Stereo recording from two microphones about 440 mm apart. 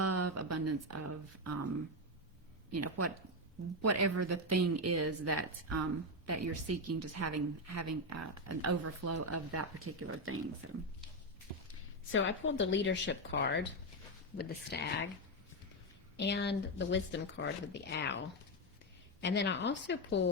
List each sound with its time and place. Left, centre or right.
0.0 s a sound: right
2.7 s speech: right
12.1 s speech: left
16.1 s speech: left
19.2 s speech: left